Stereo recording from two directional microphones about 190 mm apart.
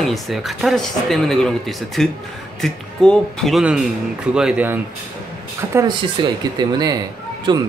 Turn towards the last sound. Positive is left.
turn(degrees=-25)  # may be behind; listen again after turning